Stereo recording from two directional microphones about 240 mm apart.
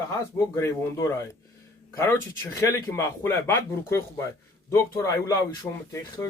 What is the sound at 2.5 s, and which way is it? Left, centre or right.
Speech, centre.